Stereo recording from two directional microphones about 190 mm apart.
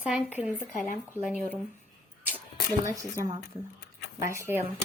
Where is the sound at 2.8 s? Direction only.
15° right (ahead or behind).